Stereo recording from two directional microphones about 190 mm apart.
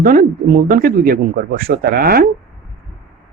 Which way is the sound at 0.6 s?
50° right (ahead or behind).